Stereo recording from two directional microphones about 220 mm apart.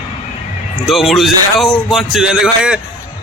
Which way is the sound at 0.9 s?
Centre (ahead or behind).